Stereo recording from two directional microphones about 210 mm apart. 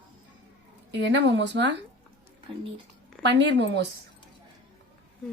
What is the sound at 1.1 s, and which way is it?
Speech, 55° right (ahead or behind).